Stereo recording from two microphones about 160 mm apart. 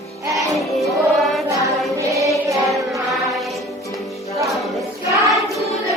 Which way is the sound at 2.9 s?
Centre (ahead or behind).